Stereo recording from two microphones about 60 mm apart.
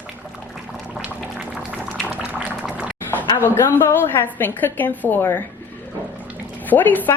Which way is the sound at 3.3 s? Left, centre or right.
Left.